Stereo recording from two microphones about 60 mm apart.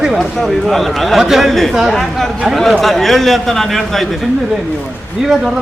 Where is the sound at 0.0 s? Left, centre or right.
Centre.